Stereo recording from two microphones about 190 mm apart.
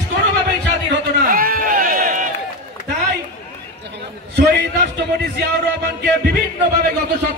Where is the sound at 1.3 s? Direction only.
50° right (ahead or behind).